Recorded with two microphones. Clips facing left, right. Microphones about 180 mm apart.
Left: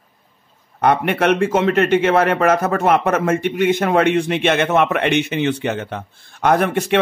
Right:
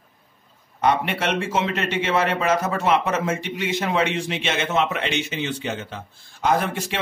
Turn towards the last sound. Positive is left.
turn(degrees=60)  # may be behind; listen again after turning